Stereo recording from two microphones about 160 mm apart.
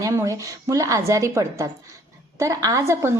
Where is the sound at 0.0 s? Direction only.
20° right (ahead or behind).